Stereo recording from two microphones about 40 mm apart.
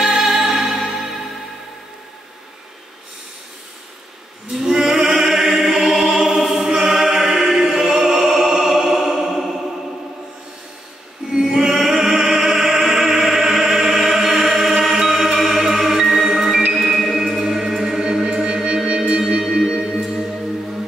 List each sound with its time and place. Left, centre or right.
0.0 s music: centre
4.5 s choir: centre
6.6 s music: centre
11.3 s opera: centre
14.8 s music: centre